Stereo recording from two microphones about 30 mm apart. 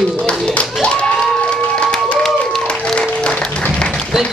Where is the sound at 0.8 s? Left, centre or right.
Left.